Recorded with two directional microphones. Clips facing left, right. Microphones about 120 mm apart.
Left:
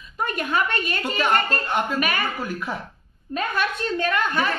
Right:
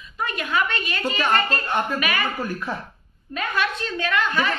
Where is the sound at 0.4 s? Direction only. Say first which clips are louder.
Even; 50° left (ahead or behind).